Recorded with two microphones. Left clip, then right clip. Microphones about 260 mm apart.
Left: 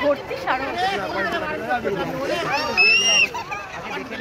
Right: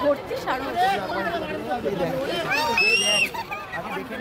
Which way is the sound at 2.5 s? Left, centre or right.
Right.